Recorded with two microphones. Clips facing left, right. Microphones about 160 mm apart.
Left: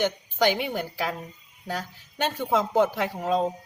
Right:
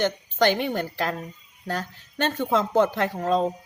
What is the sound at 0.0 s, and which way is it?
Speech, 10° left (ahead or behind).